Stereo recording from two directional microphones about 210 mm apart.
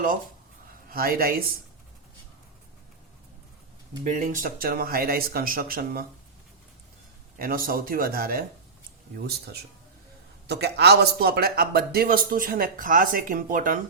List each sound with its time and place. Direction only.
0.9 s a man's voice: 45° right (ahead or behind)
4.0 s a man's voice: 40° right (ahead or behind)
7.3 s a man's voice: 45° right (ahead or behind)
10.4 s a man's voice: 50° right (ahead or behind)